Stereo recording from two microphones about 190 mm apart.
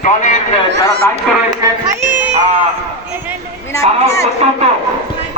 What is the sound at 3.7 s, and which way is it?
Speech, 15° left (ahead or behind).